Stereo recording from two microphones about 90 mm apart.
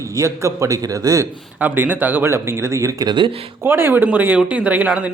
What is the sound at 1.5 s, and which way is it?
Speech, 20° right (ahead or behind).